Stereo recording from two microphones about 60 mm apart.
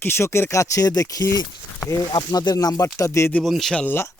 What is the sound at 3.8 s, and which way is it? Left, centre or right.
Speech, left.